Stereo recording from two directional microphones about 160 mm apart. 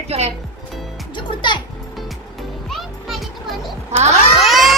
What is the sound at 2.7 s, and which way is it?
Music, centre (ahead or behind).